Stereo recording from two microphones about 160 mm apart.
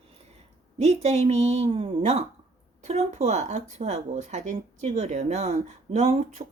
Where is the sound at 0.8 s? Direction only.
40° right (ahead or behind).